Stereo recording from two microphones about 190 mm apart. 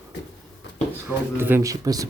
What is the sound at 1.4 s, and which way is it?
Speech, 10° right (ahead or behind).